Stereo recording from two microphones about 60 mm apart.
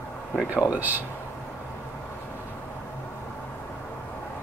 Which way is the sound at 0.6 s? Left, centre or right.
Right.